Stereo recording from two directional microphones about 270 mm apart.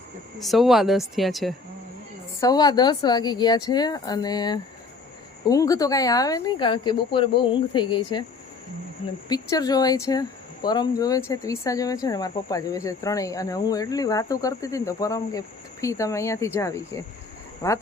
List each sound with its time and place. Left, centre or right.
0.3 s speech: centre
2.4 s speech: centre
9.3 s speech: centre